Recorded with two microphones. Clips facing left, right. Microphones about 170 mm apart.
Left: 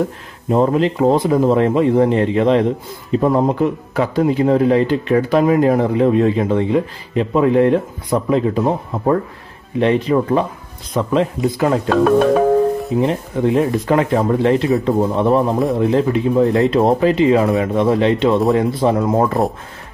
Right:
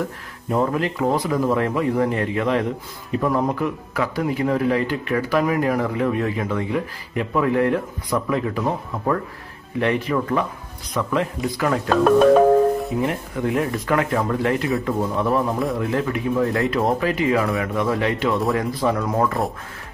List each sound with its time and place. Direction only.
0.0 s speech: 25° left (ahead or behind)
12.9 s speech: 25° left (ahead or behind)